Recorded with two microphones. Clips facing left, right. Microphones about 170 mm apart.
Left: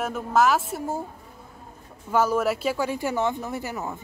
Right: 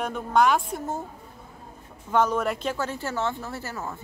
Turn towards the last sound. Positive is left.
turn(degrees=15)  # may be behind; listen again after turning